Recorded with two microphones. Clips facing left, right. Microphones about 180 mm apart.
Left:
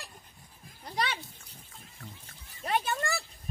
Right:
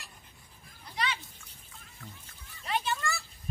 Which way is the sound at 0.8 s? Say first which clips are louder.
Left 2 dB; 40° left (ahead or behind).